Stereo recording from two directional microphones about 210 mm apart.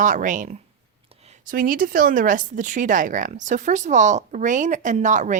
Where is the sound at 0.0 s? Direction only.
40° right (ahead or behind).